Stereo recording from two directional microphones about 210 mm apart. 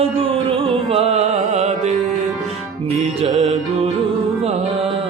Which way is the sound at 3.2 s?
30° right (ahead or behind).